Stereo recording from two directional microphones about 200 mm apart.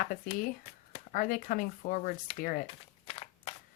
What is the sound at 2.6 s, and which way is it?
Crumpling, 25° left (ahead or behind).